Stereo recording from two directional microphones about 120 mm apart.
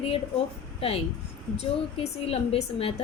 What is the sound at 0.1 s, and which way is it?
A woman's voice, 50° left (ahead or behind).